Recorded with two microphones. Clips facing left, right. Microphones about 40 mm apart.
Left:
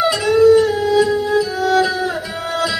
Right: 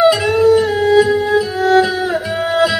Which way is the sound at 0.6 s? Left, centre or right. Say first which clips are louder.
Right 2 dB; centre.